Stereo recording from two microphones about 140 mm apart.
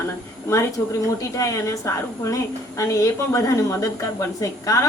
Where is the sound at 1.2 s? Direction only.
25° left (ahead or behind).